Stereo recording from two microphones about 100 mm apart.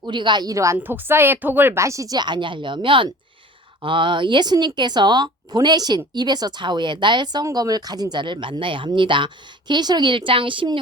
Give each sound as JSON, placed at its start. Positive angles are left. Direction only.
{"t": 0.0, "sound": "speech", "side_deg": -50}
{"t": 0.8, "sound": "a woman's voice", "side_deg": -20}